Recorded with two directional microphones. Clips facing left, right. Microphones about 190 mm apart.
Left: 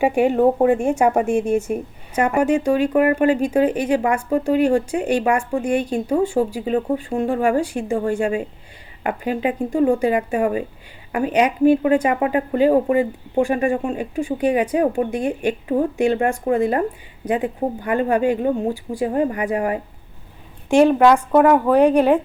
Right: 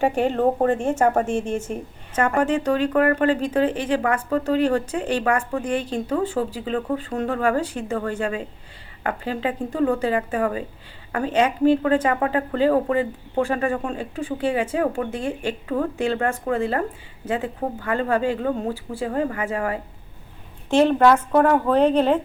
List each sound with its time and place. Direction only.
0.0 s a woman's voice: 10° left (ahead or behind)
21.0 s a woman's voice: centre (ahead or behind)
21.4 s speech: 10° left (ahead or behind)